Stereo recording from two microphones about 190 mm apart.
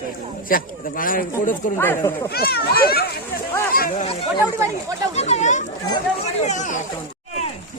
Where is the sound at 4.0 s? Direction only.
30° left (ahead or behind).